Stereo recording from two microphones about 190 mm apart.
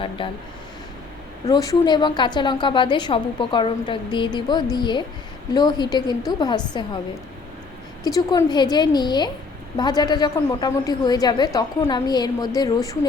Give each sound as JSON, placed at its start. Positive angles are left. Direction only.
{"t": 0.2, "sound": "a woman's voice", "side_deg": 25}
{"t": 1.5, "sound": "a woman's voice", "side_deg": 20}
{"t": 8.0, "sound": "a woman's voice", "side_deg": 20}